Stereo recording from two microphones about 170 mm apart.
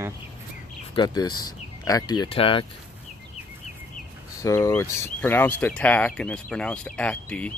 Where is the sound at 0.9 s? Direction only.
25° left (ahead or behind).